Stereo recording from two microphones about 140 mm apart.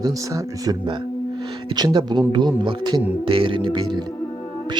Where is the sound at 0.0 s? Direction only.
25° right (ahead or behind).